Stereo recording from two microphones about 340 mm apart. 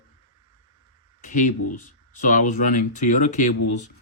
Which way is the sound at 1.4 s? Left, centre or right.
Left.